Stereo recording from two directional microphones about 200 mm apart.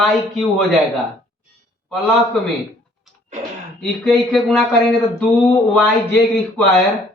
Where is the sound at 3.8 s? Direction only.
Centre (ahead or behind).